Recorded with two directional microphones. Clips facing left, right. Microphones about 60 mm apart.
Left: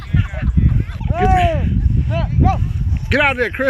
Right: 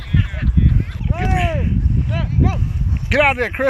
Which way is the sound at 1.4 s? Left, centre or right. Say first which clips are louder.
Left 4 dB; centre.